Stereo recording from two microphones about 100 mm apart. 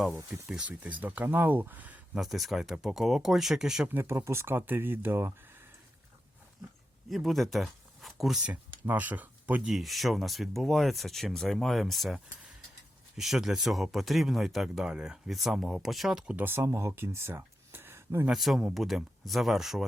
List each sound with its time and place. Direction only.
0.4 s speech: 10° right (ahead or behind)
2.1 s speech: centre (ahead or behind)
3.8 s speech: 25° right (ahead or behind)
7.1 s speech: centre (ahead or behind)
8.9 s speech: 15° right (ahead or behind)
9.6 s speech: centre (ahead or behind); by 18.3 s 25° right (ahead or behind)
18.3 s speech: centre (ahead or behind)